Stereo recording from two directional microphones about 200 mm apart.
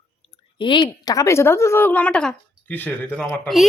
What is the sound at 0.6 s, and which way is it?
A woman's voice, 25° left (ahead or behind).